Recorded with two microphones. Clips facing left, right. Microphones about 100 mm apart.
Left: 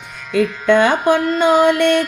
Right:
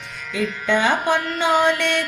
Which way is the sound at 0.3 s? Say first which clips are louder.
Left 8 dB; 55° left (ahead or behind).